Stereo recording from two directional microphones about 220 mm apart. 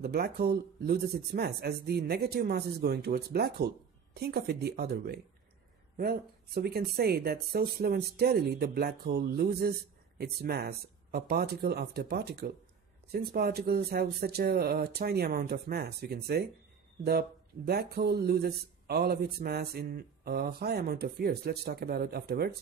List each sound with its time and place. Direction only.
0.0 s speech: 45° right (ahead or behind)